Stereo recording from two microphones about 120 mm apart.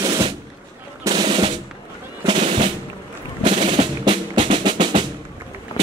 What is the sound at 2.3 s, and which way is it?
Music, 65° right (ahead or behind).